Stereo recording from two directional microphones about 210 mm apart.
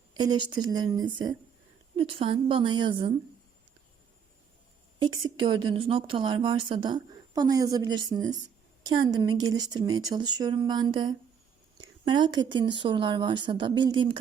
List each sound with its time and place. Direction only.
0.1 s speech: 20° right (ahead or behind)
4.9 s speech: 20° right (ahead or behind)